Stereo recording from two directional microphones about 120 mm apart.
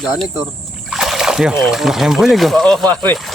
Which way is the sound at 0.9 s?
Centre (ahead or behind).